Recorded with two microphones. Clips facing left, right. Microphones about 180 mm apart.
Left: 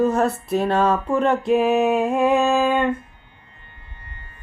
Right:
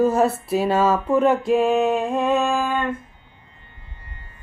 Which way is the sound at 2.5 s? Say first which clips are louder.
Left 4 dB; 20° left (ahead or behind).